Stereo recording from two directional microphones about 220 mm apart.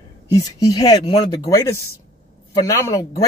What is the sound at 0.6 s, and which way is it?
Speech, 15° left (ahead or behind).